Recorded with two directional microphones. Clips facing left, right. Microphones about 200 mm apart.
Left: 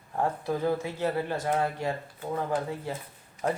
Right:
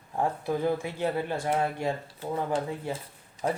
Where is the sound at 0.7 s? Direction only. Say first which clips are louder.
Left 1 dB; 15° right (ahead or behind).